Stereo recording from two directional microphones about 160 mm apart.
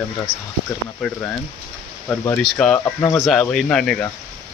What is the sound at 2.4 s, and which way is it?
Speech, 5° left (ahead or behind).